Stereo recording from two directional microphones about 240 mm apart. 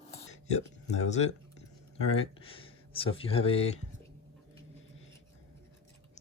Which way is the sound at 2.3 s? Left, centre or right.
Left.